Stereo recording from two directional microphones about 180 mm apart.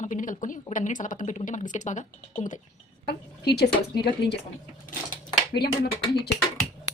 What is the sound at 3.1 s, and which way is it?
Speech, 65° left (ahead or behind).